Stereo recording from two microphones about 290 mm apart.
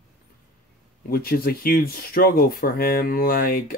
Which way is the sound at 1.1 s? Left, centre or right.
Left.